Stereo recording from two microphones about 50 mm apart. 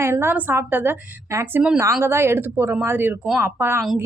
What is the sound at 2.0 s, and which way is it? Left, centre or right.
A woman's voice, right.